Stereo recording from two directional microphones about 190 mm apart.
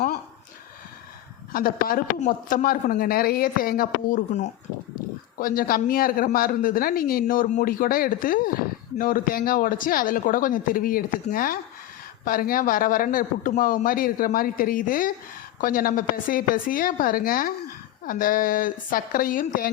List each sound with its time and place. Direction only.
1.5 s speech: 50° left (ahead or behind)